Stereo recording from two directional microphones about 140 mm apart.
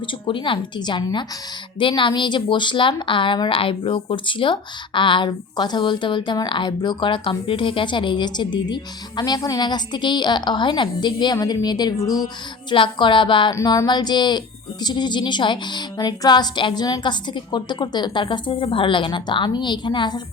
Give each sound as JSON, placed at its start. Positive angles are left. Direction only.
{"t": 0.1, "sound": "a woman's voice", "side_deg": 35}
{"t": 12.7, "sound": "a woman's voice", "side_deg": 35}
{"t": 13.5, "sound": "a woman's voice", "side_deg": 25}